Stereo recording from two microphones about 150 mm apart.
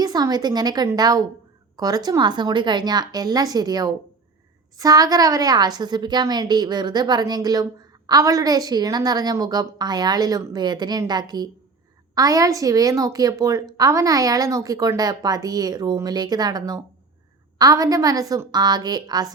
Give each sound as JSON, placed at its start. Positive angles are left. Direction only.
{"t": 0.0, "sound": "a woman's voice", "side_deg": -25}